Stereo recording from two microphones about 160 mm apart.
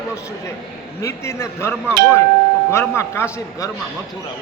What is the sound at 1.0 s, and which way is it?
Speech, 15° left (ahead or behind).